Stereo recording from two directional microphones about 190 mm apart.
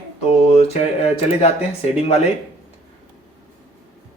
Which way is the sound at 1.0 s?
35° left (ahead or behind).